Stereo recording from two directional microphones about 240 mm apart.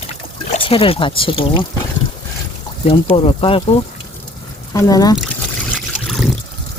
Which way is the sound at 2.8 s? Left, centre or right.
Left.